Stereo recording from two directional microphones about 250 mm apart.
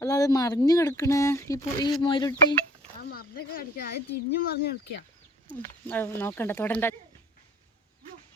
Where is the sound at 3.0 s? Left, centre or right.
Left.